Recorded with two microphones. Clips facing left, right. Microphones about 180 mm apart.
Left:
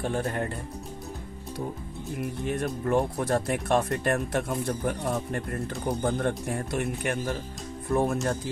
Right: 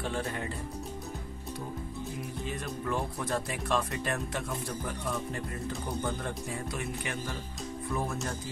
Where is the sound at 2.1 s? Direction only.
60° left (ahead or behind).